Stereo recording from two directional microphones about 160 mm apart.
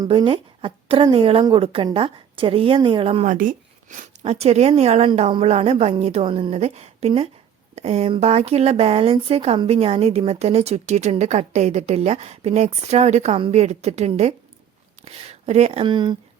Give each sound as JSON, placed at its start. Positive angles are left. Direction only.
{"t": 0.1, "sound": "a woman's voice", "side_deg": -35}
{"t": 3.2, "sound": "a sound", "side_deg": -55}
{"t": 4.2, "sound": "a woman's voice", "side_deg": -40}